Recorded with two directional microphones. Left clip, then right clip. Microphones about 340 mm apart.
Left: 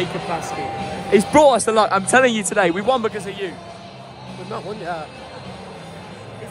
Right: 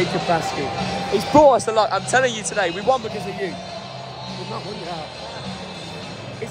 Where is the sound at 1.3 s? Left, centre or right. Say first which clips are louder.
Right 1 dB; left.